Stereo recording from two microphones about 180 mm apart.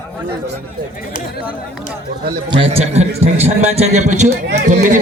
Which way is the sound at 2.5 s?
30° right (ahead or behind).